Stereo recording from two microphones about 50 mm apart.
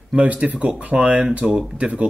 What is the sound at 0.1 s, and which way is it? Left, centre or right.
Speech, right.